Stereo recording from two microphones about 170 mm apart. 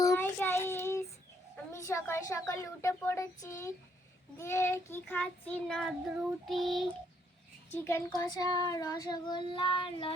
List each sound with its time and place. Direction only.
0.0 s child singing: 15° left (ahead or behind)
1.7 s speech: 15° left (ahead or behind)
6.5 s child singing: centre (ahead or behind)
7.7 s speech: 15° left (ahead or behind)
8.4 s child singing: 20° left (ahead or behind)